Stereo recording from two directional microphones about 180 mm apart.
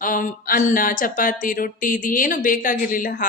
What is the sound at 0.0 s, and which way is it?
Speech, 50° left (ahead or behind).